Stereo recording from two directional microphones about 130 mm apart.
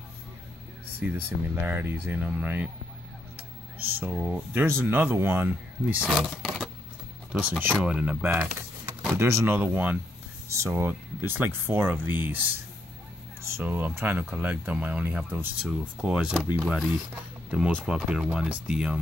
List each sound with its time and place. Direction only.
0.9 s speech: 15° right (ahead or behind)
3.9 s speech: 10° right (ahead or behind)